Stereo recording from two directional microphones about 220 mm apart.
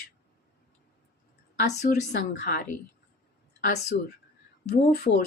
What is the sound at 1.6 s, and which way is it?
Speech, 45° left (ahead or behind).